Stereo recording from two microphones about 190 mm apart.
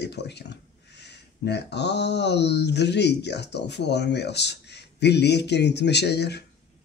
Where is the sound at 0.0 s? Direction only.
60° left (ahead or behind).